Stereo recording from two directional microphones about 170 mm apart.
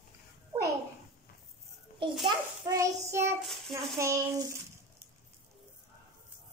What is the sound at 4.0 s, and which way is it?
Speech, 20° right (ahead or behind).